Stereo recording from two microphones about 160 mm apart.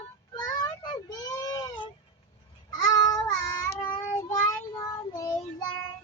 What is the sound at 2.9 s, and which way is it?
Child singing, 25° left (ahead or behind).